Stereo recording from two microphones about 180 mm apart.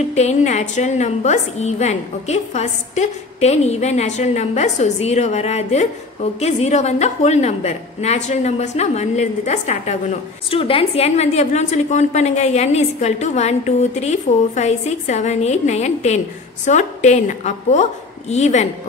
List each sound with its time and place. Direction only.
0.1 s a woman's voice: 40° left (ahead or behind)